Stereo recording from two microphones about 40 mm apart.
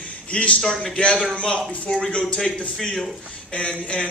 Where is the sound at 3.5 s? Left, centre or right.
Left.